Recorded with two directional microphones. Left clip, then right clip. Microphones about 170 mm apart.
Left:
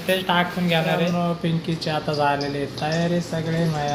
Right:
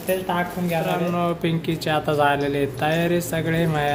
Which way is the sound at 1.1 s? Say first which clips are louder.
Right 2 dB; 15° right (ahead or behind).